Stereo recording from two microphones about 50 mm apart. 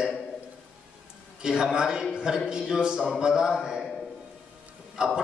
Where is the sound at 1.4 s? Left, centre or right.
Centre.